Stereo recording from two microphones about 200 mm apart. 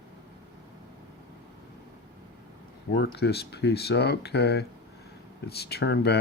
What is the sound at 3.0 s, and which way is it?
Speech, 55° left (ahead or behind).